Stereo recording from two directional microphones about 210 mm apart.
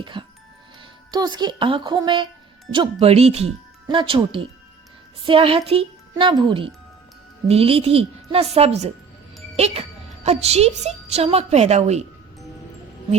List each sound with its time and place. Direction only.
0.0 s a woman's voice: 20° right (ahead or behind)